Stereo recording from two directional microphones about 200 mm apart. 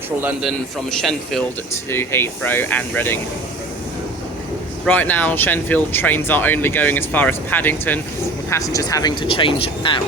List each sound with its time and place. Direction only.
0.2 s a man's voice: 10° right (ahead or behind); by 3.2 s 10° left (ahead or behind)
4.9 s speech: 10° left (ahead or behind); by 10.0 s 25° left (ahead or behind)